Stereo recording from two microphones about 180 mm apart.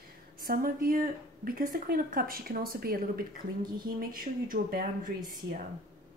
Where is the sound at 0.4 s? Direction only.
55° right (ahead or behind).